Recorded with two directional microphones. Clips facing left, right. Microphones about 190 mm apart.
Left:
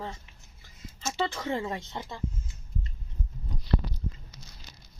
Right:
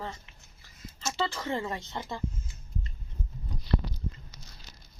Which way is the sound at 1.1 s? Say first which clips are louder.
Left 1 dB; 20° left (ahead or behind).